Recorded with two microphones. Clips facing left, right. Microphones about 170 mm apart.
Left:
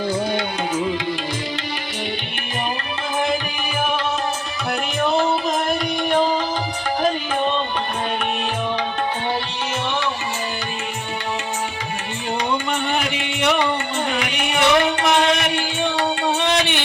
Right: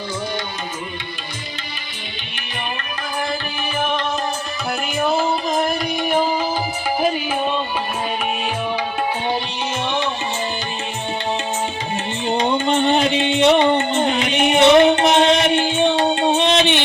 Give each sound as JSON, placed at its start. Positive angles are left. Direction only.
{"t": 4.9, "sound": "music", "side_deg": 0}
{"t": 12.3, "sound": "music", "side_deg": -25}